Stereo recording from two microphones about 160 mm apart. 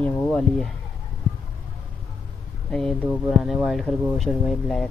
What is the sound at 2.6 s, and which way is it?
Speech, 5° left (ahead or behind).